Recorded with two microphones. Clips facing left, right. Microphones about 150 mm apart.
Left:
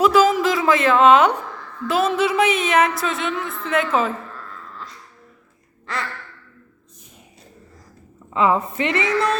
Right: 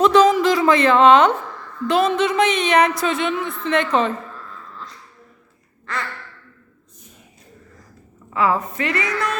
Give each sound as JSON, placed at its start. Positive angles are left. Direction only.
{"t": 0.0, "sound": "a woman's voice", "side_deg": 5}
{"t": 8.3, "sound": "a woman's voice", "side_deg": 20}